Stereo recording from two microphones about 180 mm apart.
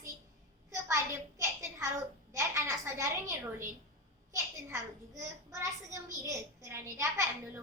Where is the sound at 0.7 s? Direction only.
15° right (ahead or behind).